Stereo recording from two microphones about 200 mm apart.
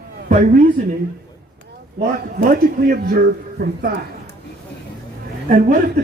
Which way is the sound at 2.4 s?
45° right (ahead or behind).